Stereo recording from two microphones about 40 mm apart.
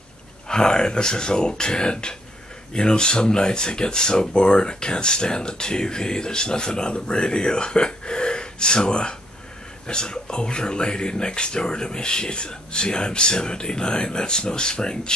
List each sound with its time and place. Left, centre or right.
0.5 s speech: centre